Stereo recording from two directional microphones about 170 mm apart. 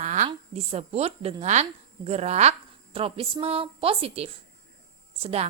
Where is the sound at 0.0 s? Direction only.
45° right (ahead or behind).